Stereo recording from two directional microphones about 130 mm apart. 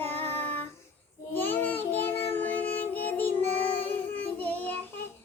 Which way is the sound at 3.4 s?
15° left (ahead or behind).